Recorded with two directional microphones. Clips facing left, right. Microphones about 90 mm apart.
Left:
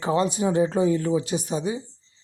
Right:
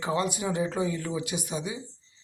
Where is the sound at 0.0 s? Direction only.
30° left (ahead or behind).